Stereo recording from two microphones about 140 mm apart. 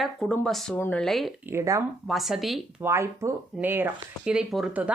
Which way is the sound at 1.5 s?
25° right (ahead or behind).